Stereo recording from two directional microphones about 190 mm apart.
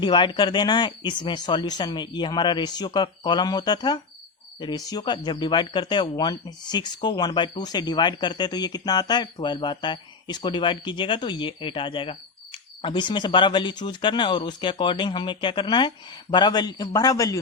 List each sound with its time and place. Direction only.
0.0 s speech: 25° left (ahead or behind)